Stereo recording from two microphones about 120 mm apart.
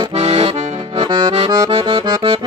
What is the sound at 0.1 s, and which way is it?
Accordion, 65° right (ahead or behind).